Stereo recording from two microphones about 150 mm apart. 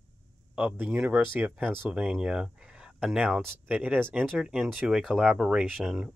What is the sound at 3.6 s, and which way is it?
Speech, 10° right (ahead or behind).